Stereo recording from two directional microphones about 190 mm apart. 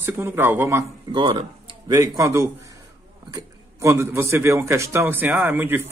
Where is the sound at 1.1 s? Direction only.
25° right (ahead or behind).